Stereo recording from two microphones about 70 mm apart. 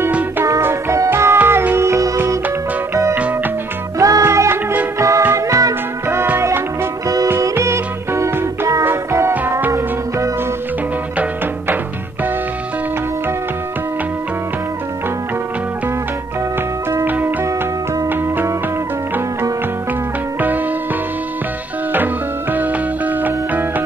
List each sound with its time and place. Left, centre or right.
0.6 s music: right
1.8 s music: right
7.5 s music: right
16.9 s music: right
20.3 s music: right
21.9 s music: right